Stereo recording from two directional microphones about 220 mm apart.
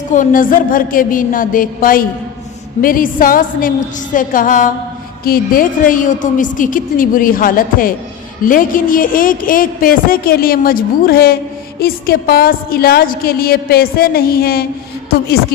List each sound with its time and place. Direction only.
0.1 s a woman's voice: 35° left (ahead or behind)